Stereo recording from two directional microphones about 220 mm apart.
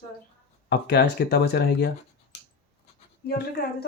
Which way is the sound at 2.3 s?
50° left (ahead or behind).